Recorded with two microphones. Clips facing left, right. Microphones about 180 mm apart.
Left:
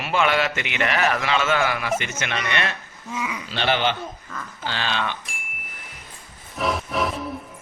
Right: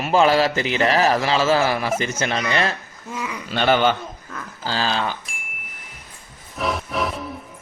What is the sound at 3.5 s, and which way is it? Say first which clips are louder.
Speech: right 5 dB; 45° right (ahead or behind).